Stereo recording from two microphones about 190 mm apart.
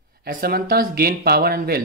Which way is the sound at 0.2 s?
55° right (ahead or behind).